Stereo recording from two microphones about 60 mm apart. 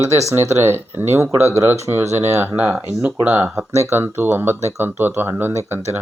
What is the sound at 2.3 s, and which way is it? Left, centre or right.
Speech, right.